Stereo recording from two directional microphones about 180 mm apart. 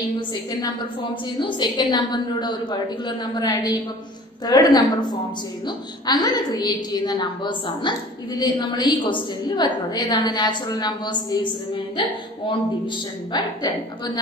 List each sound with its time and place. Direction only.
0.3 s a woman's voice: 25° left (ahead or behind)